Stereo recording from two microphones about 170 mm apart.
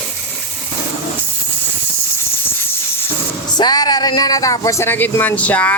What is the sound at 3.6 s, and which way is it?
Speech, 25° left (ahead or behind).